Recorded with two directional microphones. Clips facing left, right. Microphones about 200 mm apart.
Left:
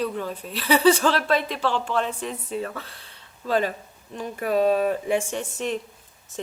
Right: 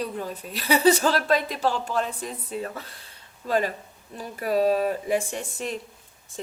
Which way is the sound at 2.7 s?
40° right (ahead or behind).